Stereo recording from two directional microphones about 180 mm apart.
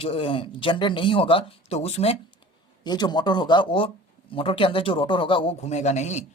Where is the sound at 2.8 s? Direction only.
25° left (ahead or behind); by 6.2 s 40° left (ahead or behind).